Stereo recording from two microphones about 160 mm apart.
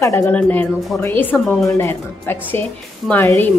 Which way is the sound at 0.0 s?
15° left (ahead or behind).